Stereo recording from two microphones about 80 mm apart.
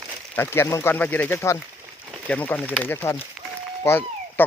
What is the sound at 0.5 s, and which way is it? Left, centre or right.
Speech, left.